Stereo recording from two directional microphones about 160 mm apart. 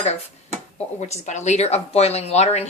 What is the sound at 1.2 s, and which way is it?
Speech, 45° left (ahead or behind).